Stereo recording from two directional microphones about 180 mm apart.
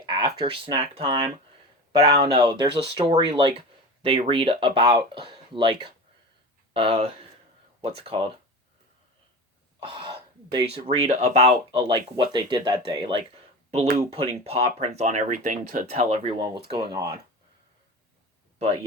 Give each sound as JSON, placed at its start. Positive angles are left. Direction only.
{"t": 0.0, "sound": "speech", "side_deg": -25}
{"t": 2.4, "sound": "speech", "side_deg": -25}
{"t": 5.3, "sound": "a sound", "side_deg": -25}
{"t": 6.7, "sound": "speech", "side_deg": -30}
{"t": 9.8, "sound": "throat clearing", "side_deg": -25}
{"t": 10.5, "sound": "speech", "side_deg": -30}
{"t": 16.7, "sound": "speech", "side_deg": -20}
{"t": 18.6, "sound": "speech", "side_deg": -35}